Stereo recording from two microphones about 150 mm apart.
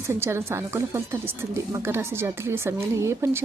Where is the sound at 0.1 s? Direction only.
15° right (ahead or behind).